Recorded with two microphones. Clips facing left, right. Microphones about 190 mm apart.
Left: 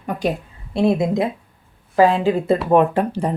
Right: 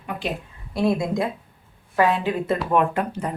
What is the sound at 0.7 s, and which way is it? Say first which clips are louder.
Speech: left 4 dB; 25° left (ahead or behind).